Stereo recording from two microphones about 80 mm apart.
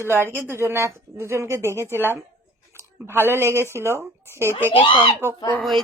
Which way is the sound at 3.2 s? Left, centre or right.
Right.